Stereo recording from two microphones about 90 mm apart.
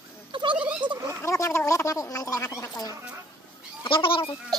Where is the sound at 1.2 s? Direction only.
35° left (ahead or behind).